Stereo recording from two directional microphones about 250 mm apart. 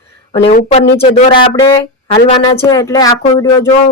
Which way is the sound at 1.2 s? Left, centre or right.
Left.